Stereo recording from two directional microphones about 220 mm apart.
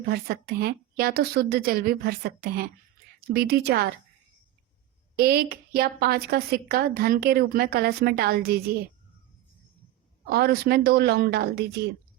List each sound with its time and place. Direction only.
0.1 s a woman's voice: 45° right (ahead or behind)
5.1 s a woman's voice: 45° right (ahead or behind)
10.2 s a woman's voice: 45° right (ahead or behind)